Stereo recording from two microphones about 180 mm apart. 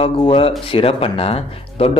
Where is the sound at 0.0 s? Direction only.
30° left (ahead or behind).